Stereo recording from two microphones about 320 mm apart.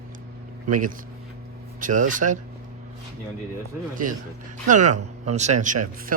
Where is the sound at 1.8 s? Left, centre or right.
Right.